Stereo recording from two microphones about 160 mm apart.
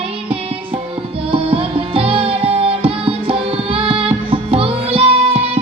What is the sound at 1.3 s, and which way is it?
Music, 35° right (ahead or behind).